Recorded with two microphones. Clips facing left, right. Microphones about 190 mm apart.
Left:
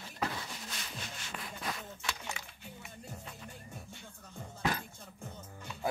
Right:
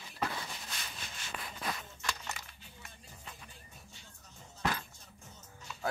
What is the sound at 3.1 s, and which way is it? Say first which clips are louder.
Music: left 6 dB; 60° left (ahead or behind).